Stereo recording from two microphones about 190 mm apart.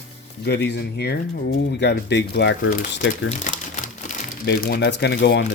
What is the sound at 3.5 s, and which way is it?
Crumpling, 45° left (ahead or behind).